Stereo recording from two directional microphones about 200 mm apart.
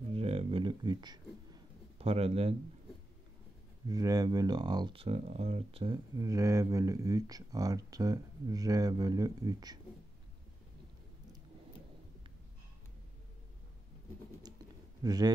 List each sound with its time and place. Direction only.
0.1 s a sound: 30° right (ahead or behind)
3.8 s speech: 20° right (ahead or behind)
6.1 s speech: 15° right (ahead or behind)
15.0 s a man's voice: 20° right (ahead or behind)